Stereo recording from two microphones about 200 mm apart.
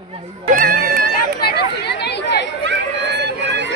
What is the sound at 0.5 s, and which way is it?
Music, 45° right (ahead or behind).